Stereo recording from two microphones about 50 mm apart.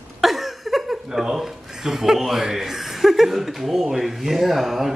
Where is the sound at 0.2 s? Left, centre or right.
Centre.